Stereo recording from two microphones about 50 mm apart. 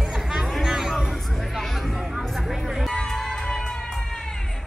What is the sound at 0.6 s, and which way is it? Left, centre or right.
Music, centre.